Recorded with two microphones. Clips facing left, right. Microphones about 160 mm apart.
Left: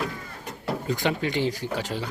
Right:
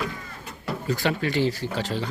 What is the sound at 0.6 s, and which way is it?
Speech, 20° left (ahead or behind).